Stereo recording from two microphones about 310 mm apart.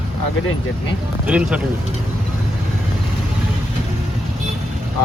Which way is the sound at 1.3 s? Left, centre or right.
Centre.